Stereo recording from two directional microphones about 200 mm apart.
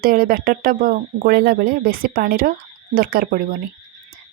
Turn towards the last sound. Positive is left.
turn(degrees=-45)  # may be behind; listen again after turning